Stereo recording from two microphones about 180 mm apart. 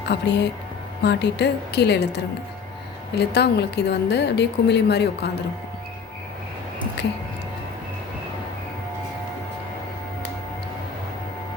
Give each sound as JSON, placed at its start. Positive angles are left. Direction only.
{"t": 0.1, "sound": "a woman's voice", "side_deg": 75}